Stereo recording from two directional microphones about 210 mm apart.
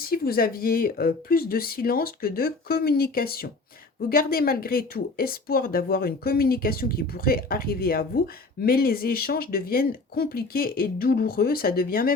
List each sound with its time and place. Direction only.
0.1 s speech: 45° left (ahead or behind)